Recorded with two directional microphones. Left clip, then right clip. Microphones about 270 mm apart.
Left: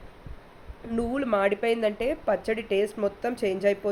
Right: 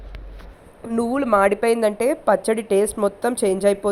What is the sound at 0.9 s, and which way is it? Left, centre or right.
A woman's voice, centre.